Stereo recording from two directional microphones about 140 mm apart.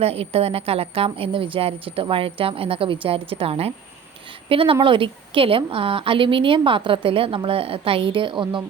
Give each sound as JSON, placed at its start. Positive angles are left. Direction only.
{"t": 0.0, "sound": "a woman's voice", "side_deg": -45}